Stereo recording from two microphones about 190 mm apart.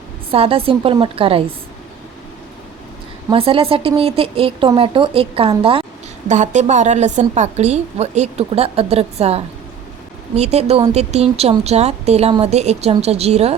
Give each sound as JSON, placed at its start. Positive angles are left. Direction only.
{"t": 0.3, "sound": "speech", "side_deg": -30}
{"t": 3.2, "sound": "speech", "side_deg": -30}
{"t": 6.2, "sound": "a woman's voice", "side_deg": -40}